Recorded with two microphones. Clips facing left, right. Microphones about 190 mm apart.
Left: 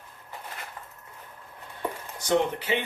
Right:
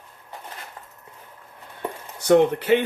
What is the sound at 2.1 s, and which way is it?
Speech, 60° right (ahead or behind).